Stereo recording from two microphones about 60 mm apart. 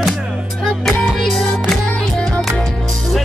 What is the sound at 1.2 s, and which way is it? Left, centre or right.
Music, centre.